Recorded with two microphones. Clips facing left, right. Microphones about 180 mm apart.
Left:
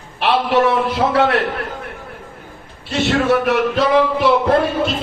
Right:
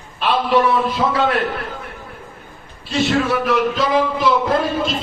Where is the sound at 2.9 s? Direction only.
60° left (ahead or behind).